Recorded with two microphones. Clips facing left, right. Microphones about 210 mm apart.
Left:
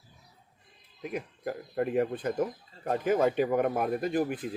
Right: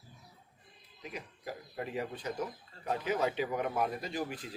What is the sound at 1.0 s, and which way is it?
Speech, 55° left (ahead or behind).